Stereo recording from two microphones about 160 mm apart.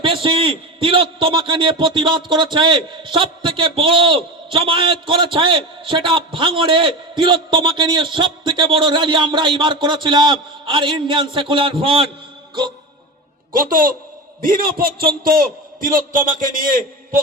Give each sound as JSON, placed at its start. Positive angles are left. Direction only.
{"t": 0.0, "sound": "a man's voice", "side_deg": -35}
{"t": 13.5, "sound": "a man's voice", "side_deg": -60}